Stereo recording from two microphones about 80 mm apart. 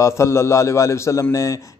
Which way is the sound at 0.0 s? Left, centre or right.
Left.